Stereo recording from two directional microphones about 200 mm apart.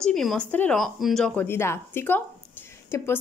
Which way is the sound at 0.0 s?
Centre (ahead or behind).